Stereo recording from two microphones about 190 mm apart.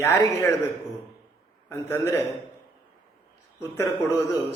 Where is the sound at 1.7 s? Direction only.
15° left (ahead or behind).